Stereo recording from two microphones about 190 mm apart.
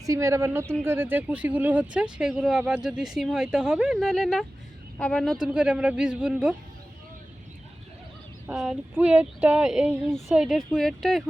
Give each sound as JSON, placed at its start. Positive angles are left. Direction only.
{"t": 0.0, "sound": "speech", "side_deg": -15}
{"t": 8.4, "sound": "speech", "side_deg": 0}